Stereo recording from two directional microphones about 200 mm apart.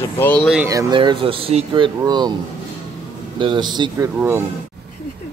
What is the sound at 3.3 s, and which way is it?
Speech, 25° right (ahead or behind).